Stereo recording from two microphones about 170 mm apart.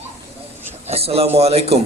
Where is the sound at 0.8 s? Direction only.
35° right (ahead or behind).